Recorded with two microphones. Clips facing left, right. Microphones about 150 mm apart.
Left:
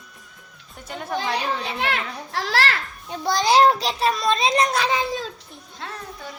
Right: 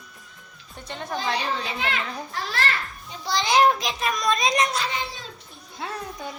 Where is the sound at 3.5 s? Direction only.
35° left (ahead or behind).